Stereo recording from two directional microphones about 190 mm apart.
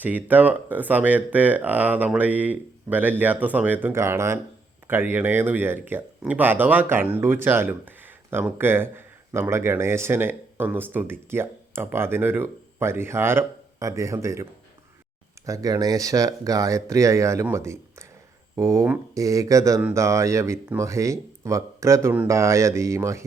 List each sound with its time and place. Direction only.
0.0 s speech: 10° right (ahead or behind)
15.4 s speech: 20° right (ahead or behind)